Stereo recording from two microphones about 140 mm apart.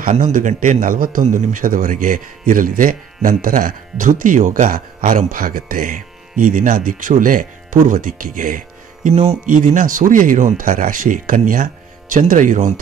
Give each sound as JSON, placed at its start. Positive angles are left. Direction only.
{"t": 0.1, "sound": "a man's voice", "side_deg": -60}
{"t": 9.1, "sound": "speech", "side_deg": -50}
{"t": 9.5, "sound": "a man's voice", "side_deg": -70}